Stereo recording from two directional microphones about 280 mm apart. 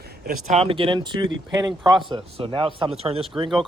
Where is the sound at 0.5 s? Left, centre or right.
Centre.